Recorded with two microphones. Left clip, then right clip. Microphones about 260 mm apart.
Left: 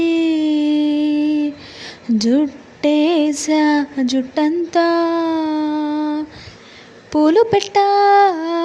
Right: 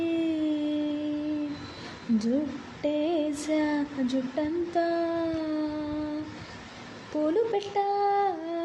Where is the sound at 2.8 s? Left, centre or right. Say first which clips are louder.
Left 12 dB; left.